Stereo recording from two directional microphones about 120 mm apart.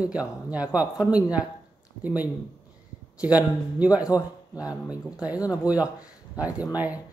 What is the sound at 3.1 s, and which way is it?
Speech, 10° right (ahead or behind).